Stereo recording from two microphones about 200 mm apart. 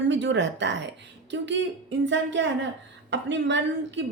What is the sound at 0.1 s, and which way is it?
A woman's voice, 65° right (ahead or behind).